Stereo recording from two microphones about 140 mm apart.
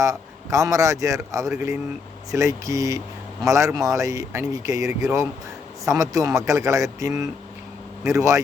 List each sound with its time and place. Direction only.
0.0 s a man's voice: 25° right (ahead or behind)